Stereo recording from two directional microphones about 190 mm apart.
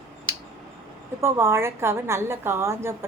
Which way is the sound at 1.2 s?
15° right (ahead or behind).